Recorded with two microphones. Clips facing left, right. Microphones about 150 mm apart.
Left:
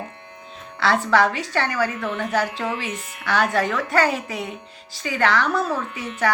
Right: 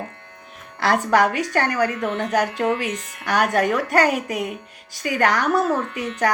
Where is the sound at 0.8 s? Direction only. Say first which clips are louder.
Right 1 dB; 45° right (ahead or behind).